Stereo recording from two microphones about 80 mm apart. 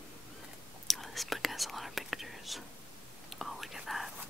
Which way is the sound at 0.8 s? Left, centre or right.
Centre.